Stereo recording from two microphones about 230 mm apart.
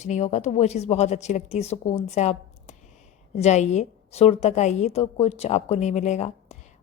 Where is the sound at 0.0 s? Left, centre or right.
Left.